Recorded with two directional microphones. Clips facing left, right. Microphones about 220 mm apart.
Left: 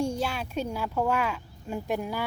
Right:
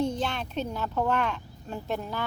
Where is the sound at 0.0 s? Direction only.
10° left (ahead or behind).